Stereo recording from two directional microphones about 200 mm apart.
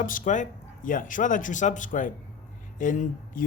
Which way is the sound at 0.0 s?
40° left (ahead or behind).